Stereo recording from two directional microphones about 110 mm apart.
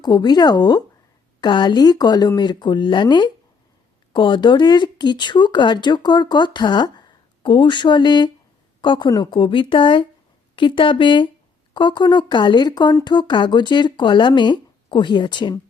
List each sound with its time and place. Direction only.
0.0 s speech: 40° left (ahead or behind)